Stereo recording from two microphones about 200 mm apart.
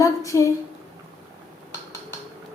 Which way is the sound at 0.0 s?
15° left (ahead or behind).